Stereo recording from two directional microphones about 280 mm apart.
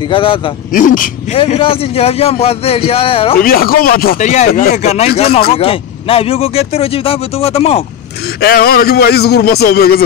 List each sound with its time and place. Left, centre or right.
0.1 s speech: centre
0.7 s speech: left
3.3 s speech: left
8.4 s speech: left